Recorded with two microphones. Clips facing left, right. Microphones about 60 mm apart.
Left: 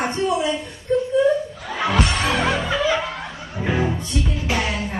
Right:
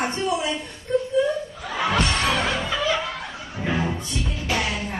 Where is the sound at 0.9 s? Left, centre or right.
Centre.